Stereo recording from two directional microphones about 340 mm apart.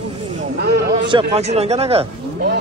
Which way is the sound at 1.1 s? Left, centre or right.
Centre.